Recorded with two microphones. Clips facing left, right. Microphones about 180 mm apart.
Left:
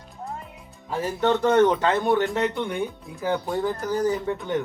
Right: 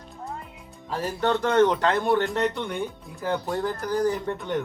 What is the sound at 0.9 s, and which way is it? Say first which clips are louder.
Speech: left 2 dB; 10° left (ahead or behind).